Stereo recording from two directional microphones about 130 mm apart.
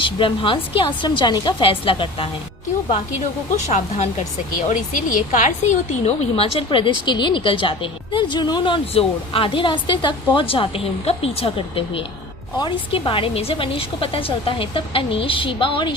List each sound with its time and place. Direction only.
0.0 s speech: 40° left (ahead or behind)
3.7 s speech: 60° left (ahead or behind)
4.7 s a woman's voice: 80° left; by 15.9 s 40° left (ahead or behind)